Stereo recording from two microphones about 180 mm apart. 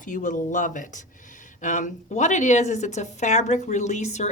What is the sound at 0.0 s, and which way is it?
A woman's voice, 45° left (ahead or behind).